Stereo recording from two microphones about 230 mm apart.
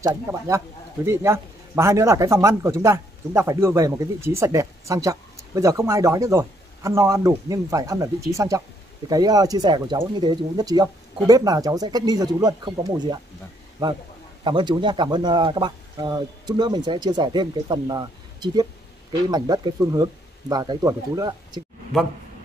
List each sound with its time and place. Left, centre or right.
0.0 s speech: centre